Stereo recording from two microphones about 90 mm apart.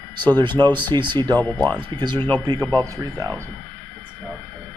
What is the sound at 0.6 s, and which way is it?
Speech, 60° right (ahead or behind).